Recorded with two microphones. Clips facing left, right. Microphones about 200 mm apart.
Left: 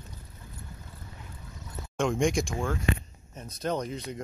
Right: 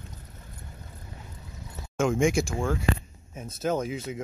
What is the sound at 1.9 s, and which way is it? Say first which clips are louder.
Speech: right 2 dB; 5° right (ahead or behind).